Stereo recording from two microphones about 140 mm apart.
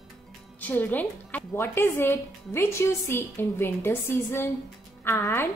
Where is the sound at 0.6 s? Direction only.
10° left (ahead or behind).